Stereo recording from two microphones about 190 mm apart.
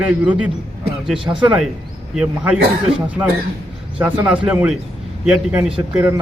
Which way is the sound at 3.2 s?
15° right (ahead or behind).